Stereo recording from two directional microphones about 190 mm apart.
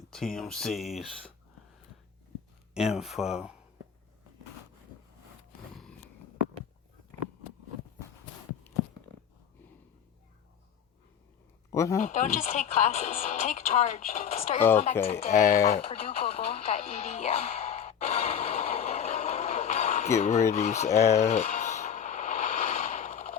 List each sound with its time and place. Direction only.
0.1 s speech: 5° left (ahead or behind)
2.7 s speech: centre (ahead or behind)
5.7 s a sound: 5° left (ahead or behind)
11.7 s speech: 15° left (ahead or behind)
11.9 s speech: 40° left (ahead or behind)
15.4 s speech: 15° left (ahead or behind)
15.7 s music: 30° left (ahead or behind)
20.5 s radio: 35° left (ahead or behind)